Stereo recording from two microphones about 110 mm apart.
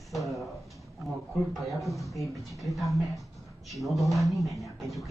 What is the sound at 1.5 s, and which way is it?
Speech, centre (ahead or behind).